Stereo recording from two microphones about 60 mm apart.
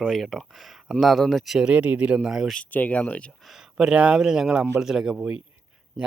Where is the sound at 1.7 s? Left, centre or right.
Right.